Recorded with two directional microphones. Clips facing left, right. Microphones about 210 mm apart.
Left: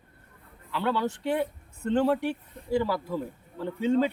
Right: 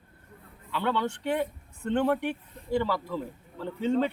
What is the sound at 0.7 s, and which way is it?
A man's voice, 5° left (ahead or behind).